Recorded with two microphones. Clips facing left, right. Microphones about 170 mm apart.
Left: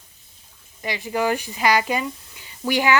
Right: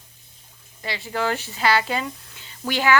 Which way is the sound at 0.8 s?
15° left (ahead or behind).